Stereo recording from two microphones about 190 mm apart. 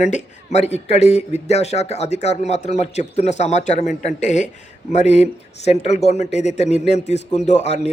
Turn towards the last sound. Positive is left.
turn(degrees=35)  # may be behind; listen again after turning